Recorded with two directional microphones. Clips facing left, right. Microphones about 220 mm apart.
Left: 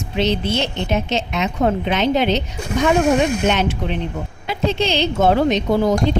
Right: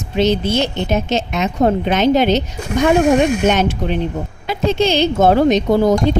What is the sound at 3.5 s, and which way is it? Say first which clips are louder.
Speech: right 3 dB; 45° right (ahead or behind).